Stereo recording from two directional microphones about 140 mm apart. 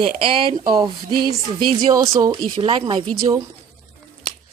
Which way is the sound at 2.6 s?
40° right (ahead or behind).